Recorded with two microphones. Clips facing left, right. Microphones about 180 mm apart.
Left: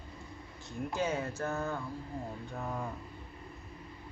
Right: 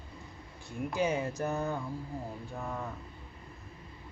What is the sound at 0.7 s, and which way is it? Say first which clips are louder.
Speech: right 3 dB; 15° right (ahead or behind).